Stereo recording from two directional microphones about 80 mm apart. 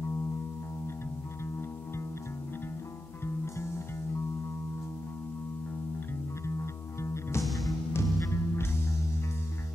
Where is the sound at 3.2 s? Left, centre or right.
Left.